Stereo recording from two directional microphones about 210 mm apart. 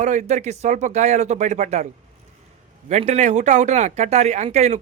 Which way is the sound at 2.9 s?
35° right (ahead or behind).